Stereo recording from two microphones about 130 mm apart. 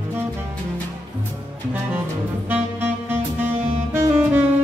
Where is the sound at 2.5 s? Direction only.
15° right (ahead or behind).